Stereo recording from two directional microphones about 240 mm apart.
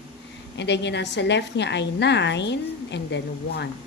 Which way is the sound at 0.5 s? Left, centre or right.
Left.